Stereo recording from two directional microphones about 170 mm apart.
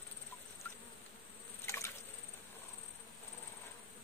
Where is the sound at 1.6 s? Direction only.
15° left (ahead or behind).